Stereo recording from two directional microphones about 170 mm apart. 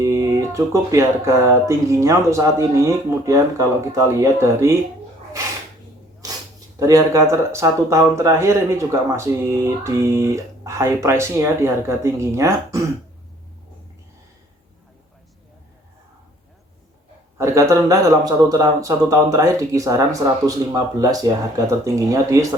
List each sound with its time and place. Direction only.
0.0 s speech: 15° right (ahead or behind)
6.7 s speech: 20° right (ahead or behind)
17.3 s speech: 15° right (ahead or behind)